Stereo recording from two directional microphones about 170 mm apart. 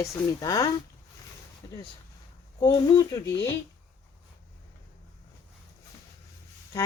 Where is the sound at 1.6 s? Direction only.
25° left (ahead or behind).